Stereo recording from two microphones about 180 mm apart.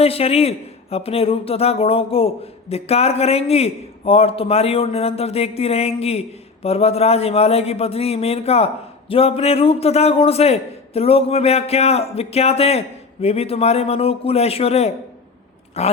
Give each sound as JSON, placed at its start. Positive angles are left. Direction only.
{"t": 0.0, "sound": "a man's voice", "side_deg": 35}